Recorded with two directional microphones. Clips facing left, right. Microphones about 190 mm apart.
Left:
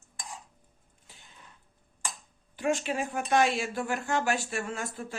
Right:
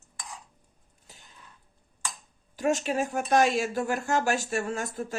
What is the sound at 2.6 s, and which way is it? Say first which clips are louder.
Speech: right 3 dB; 40° right (ahead or behind).